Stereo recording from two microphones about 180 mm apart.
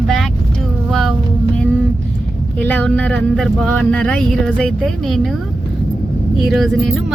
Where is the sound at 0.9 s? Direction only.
Centre (ahead or behind).